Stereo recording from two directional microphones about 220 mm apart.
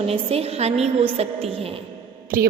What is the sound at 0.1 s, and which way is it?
A woman's voice, 25° right (ahead or behind).